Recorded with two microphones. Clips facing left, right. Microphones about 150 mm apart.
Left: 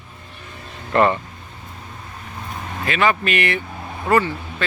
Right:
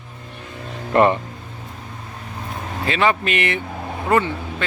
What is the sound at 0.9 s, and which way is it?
Speech, 10° right (ahead or behind).